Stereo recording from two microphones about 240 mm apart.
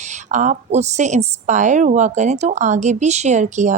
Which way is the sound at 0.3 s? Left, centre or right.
Right.